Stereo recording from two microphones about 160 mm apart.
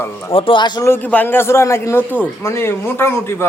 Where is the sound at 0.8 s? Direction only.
10° left (ahead or behind).